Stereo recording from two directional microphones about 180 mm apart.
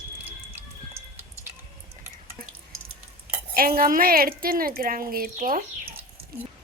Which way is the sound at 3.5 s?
55° right (ahead or behind).